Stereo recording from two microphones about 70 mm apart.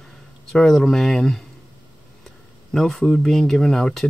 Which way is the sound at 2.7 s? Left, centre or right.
Centre.